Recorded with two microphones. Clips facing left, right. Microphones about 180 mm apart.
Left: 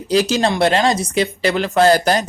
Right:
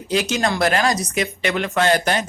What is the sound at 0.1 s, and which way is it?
Speech, 35° left (ahead or behind).